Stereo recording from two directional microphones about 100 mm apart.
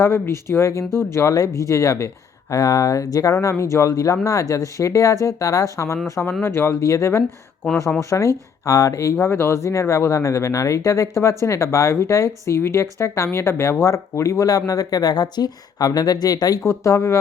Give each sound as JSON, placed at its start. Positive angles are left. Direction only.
{"t": 0.0, "sound": "speech", "side_deg": 25}